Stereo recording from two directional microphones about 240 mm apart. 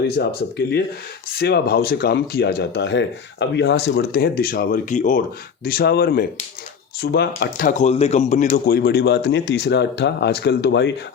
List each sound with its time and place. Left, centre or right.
0.2 s speech: left